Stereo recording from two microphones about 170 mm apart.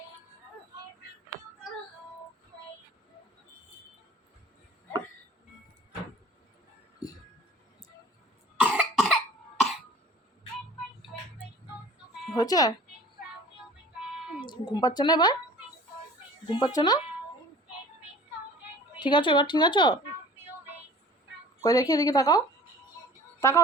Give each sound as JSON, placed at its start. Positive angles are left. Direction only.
{"t": 7.0, "sound": "a sound", "side_deg": 20}
{"t": 8.6, "sound": "cough", "side_deg": -5}
{"t": 12.4, "sound": "speech", "side_deg": 20}
{"t": 14.4, "sound": "speech", "side_deg": 25}
{"t": 16.5, "sound": "speech", "side_deg": 25}
{"t": 18.9, "sound": "speech", "side_deg": 25}
{"t": 21.6, "sound": "speech", "side_deg": 20}